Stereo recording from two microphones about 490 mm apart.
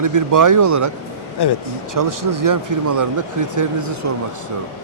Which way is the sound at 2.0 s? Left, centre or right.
Right.